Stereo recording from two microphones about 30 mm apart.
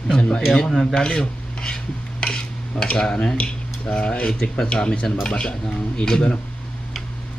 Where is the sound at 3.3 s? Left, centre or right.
Left.